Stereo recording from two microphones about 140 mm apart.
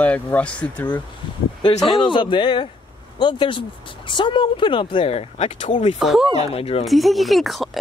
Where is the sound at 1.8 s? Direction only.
35° left (ahead or behind); by 5.7 s 50° left (ahead or behind).